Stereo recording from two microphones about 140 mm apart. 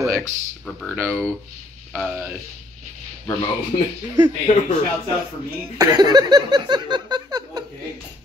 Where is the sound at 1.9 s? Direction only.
10° right (ahead or behind).